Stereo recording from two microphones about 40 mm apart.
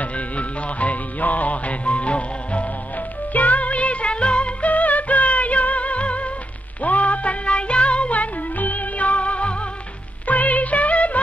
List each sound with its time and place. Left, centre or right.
0.0 s music: left
10.2 s music: left